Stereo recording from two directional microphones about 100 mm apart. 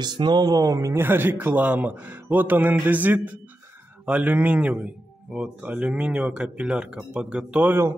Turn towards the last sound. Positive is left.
turn(degrees=-10)  # may be behind; listen again after turning